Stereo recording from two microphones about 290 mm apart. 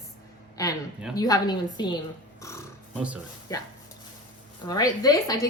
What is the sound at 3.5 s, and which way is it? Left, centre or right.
A woman's voice, centre.